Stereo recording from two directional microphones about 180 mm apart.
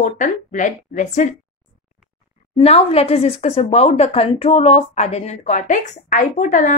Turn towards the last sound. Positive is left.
turn(degrees=45)  # may be behind; listen again after turning